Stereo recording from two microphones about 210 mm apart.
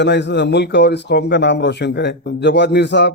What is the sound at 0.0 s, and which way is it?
Speech, 55° left (ahead or behind).